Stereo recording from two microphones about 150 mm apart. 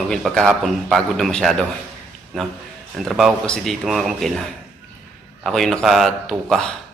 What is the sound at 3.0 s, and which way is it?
Speech, centre (ahead or behind).